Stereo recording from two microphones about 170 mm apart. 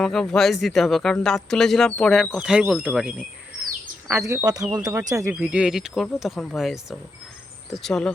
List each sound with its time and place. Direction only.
0.0 s speech: centre (ahead or behind)
4.1 s speech: 15° right (ahead or behind)
5.3 s speech: 5° right (ahead or behind)